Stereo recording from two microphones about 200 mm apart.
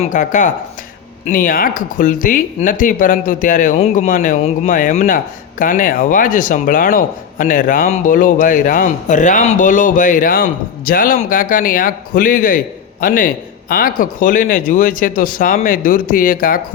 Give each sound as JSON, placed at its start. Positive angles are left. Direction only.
{"t": 0.0, "sound": "speech", "side_deg": 40}